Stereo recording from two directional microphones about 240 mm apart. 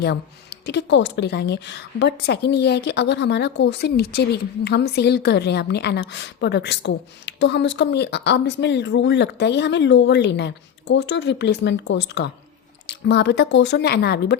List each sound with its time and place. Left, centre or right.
0.0 s speech: left